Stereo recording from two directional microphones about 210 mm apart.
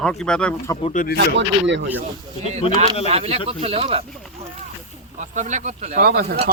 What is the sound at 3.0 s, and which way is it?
Speech, 30° right (ahead or behind).